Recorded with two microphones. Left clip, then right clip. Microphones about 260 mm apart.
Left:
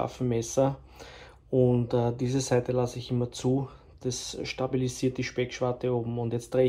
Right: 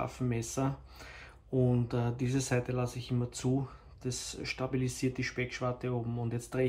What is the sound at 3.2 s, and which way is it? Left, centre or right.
Speech, right.